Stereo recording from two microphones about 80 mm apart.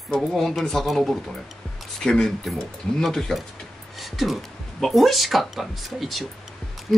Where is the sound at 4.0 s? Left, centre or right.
Centre.